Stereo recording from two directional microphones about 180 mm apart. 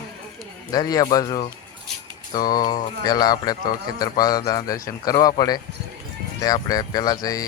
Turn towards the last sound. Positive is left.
turn(degrees=20)  # may be behind; listen again after turning